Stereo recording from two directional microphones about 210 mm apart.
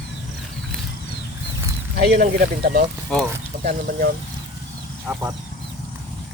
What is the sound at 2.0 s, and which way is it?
Speech, 50° right (ahead or behind).